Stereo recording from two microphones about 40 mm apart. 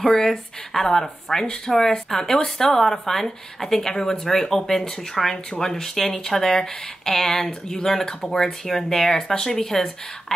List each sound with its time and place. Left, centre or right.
0.0 s a woman's voice: centre
5.3 s speech: centre
5.7 s a woman's voice: centre